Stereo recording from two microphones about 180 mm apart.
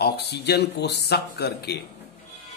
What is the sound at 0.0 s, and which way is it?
A man's voice, 65° left (ahead or behind).